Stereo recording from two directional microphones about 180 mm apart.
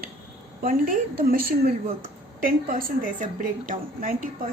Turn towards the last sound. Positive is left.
turn(degrees=-50)  # may be behind; listen again after turning